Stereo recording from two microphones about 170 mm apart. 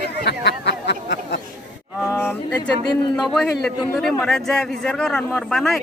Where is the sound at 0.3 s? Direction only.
80° left.